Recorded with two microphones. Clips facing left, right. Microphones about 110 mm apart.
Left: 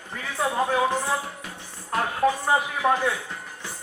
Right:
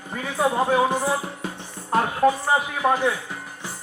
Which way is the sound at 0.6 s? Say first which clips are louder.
Right 1 dB; 15° right (ahead or behind).